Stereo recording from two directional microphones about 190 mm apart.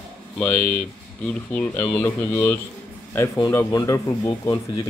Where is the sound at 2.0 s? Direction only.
10° left (ahead or behind).